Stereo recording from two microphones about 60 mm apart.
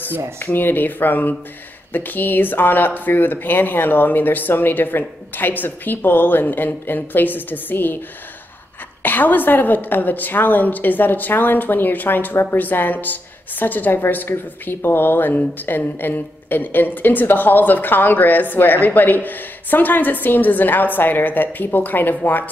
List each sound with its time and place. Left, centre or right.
0.4 s a woman's voice: left
9.0 s a woman's voice: left